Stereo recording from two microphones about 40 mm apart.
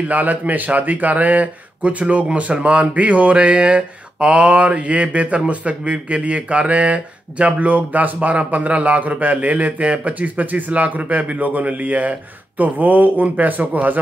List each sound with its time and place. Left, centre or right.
0.0 s speech: right